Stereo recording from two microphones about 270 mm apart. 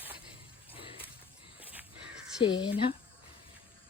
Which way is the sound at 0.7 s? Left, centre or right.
Centre.